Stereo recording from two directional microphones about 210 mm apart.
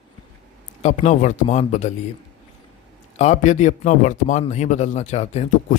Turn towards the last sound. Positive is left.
turn(degrees=30)  # may be behind; listen again after turning